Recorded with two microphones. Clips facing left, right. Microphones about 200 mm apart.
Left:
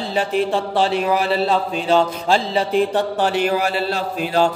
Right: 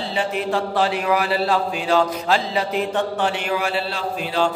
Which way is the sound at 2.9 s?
40° left (ahead or behind).